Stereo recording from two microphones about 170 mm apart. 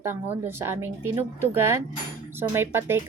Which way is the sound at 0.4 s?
15° right (ahead or behind).